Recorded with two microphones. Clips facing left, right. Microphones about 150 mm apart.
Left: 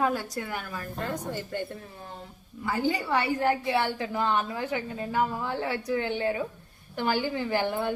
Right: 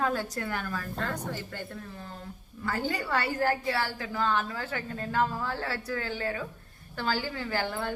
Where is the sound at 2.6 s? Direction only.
10° left (ahead or behind).